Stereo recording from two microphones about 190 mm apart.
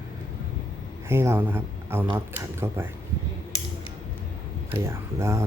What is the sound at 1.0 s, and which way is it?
Speech, 10° right (ahead or behind).